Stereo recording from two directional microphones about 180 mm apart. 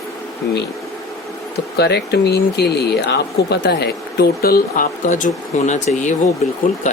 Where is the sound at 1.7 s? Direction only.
65° left (ahead or behind).